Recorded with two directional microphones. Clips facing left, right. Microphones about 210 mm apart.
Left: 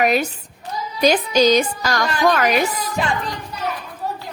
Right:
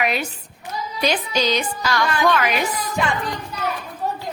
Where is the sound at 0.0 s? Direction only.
45° left (ahead or behind).